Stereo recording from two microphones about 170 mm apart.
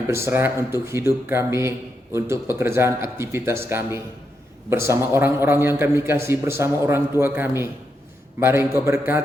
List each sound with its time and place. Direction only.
0.1 s a man's voice: 15° right (ahead or behind)